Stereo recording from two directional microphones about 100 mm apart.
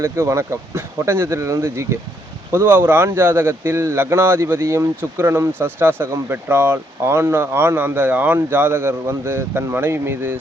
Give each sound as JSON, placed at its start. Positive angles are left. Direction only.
{"t": 0.0, "sound": "speech", "side_deg": -30}